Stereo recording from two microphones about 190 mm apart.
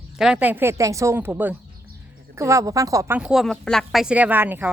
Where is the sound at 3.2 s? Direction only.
Centre (ahead or behind).